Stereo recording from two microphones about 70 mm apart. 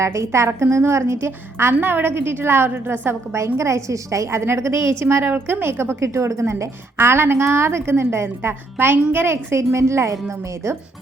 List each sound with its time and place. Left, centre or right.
0.0 s a woman's voice: right
3.3 s a woman's voice: right